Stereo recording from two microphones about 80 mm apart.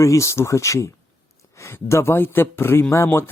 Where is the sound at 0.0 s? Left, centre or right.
Left.